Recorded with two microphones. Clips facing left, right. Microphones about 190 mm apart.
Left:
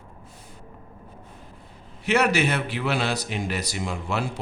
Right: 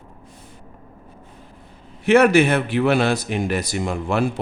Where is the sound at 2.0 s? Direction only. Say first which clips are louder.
Right 8 dB; 50° right (ahead or behind).